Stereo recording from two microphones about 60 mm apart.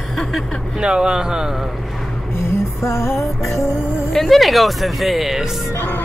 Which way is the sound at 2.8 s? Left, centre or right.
Left.